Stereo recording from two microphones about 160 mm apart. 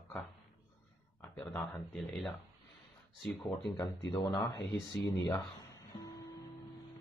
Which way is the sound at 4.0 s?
30° left (ahead or behind).